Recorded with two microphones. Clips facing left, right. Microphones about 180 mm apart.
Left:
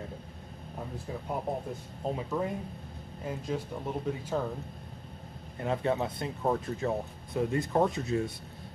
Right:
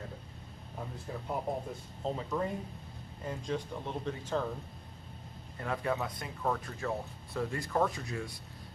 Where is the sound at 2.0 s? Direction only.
10° left (ahead or behind).